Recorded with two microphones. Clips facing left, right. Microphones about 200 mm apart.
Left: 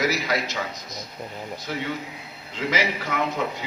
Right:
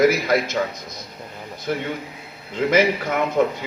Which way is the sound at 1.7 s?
50° right (ahead or behind).